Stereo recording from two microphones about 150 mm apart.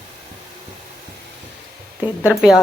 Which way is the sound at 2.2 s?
10° right (ahead or behind).